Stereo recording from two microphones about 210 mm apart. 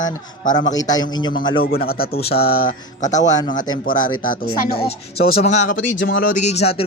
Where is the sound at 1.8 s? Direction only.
45° left (ahead or behind).